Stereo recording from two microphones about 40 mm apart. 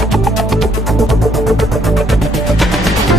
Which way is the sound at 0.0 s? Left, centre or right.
Centre.